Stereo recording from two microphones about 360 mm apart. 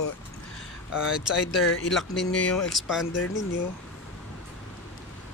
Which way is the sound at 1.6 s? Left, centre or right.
Left.